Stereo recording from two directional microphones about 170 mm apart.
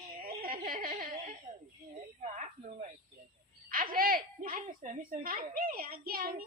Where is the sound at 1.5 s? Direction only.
35° right (ahead or behind).